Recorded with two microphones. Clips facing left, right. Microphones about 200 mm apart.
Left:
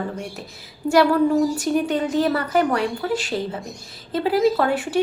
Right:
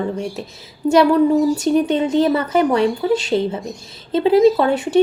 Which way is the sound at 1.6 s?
20° right (ahead or behind).